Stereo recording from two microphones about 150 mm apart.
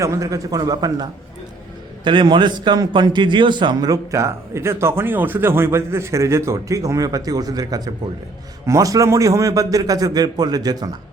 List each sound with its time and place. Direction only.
0.0 s a man's voice: 20° right (ahead or behind)
2.0 s a man's voice: 30° right (ahead or behind)